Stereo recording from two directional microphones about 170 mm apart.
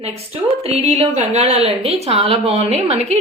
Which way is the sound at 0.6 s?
35° right (ahead or behind).